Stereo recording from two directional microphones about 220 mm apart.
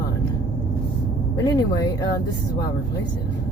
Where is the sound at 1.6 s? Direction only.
15° left (ahead or behind).